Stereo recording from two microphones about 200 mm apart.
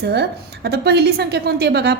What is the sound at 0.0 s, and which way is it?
A woman's voice, 55° right (ahead or behind).